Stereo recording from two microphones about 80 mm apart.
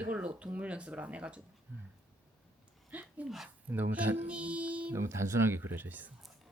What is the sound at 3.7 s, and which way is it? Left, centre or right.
Speech, right.